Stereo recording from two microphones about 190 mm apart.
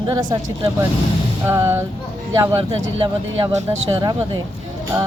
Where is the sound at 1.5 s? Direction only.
15° right (ahead or behind).